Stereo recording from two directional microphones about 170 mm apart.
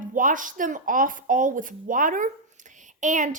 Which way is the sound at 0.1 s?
50° right (ahead or behind).